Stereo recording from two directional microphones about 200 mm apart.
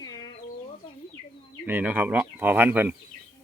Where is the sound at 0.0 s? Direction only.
20° left (ahead or behind).